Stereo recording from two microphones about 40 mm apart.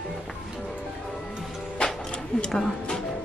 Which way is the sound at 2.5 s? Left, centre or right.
Centre.